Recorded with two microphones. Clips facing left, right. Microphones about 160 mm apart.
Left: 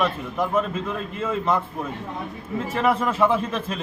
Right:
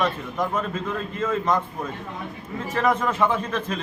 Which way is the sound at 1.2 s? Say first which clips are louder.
Even; 5° left (ahead or behind).